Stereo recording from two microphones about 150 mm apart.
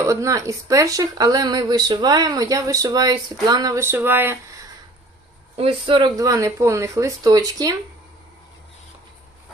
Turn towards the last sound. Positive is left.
turn(degrees=-25)  # may be behind; listen again after turning